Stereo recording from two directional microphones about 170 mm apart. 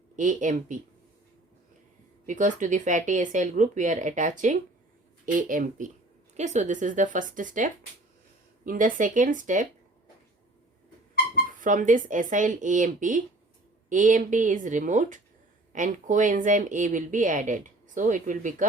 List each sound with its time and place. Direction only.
0.2 s speech: 50° right (ahead or behind)
2.2 s speech: 45° right (ahead or behind)
11.6 s speech: 50° right (ahead or behind)